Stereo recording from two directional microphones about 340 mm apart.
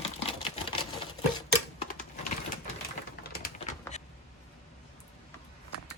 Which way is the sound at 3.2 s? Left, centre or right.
Left.